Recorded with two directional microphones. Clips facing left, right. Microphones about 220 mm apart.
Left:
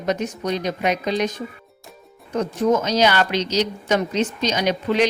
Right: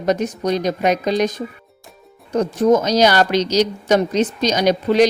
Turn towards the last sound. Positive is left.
turn(degrees=-40)  # may be behind; listen again after turning